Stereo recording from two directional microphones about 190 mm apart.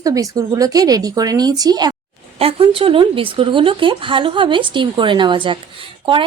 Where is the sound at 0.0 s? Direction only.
20° right (ahead or behind).